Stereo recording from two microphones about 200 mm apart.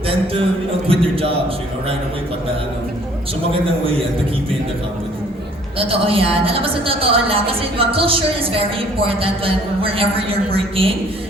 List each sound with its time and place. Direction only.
0.9 s a woman's voice: 30° right (ahead or behind)
5.8 s a woman's voice: 30° right (ahead or behind)